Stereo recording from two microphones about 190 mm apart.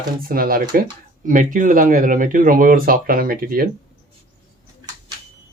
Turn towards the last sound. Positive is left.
turn(degrees=-50)  # may be behind; listen again after turning